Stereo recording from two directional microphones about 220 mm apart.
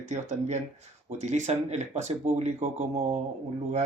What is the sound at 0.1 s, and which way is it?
Speech, 30° right (ahead or behind).